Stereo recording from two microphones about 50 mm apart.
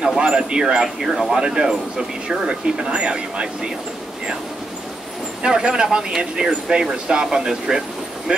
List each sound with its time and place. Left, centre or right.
0.2 s speech: centre
5.4 s speech: centre